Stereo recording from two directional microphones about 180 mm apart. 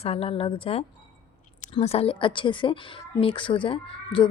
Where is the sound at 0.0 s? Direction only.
35° left (ahead or behind).